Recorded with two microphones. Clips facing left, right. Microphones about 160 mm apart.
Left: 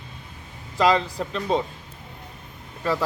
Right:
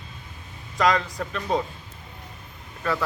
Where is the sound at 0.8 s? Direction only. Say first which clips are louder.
Left 2 dB; 30° left (ahead or behind).